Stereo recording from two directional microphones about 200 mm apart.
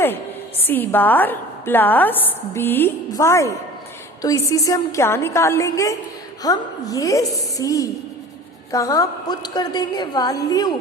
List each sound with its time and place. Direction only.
0.6 s a woman's voice: 10° left (ahead or behind)